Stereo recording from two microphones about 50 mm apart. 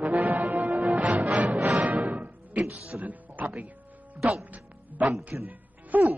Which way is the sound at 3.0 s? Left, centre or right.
Right.